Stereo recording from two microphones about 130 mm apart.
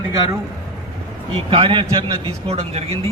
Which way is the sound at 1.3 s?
40° right (ahead or behind).